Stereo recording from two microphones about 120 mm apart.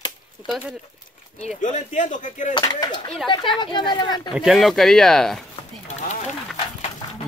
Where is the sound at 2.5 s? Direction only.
35° left (ahead or behind).